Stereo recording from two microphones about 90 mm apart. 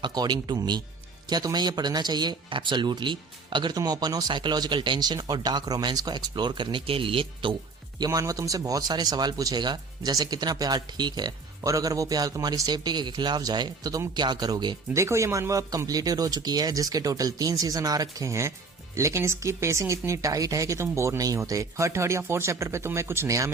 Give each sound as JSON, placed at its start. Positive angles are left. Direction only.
{"t": 0.0, "sound": "speech", "side_deg": -50}
{"t": 7.9, "sound": "speech", "side_deg": -50}
{"t": 11.6, "sound": "speech", "side_deg": -40}
{"t": 14.9, "sound": "speech", "side_deg": -35}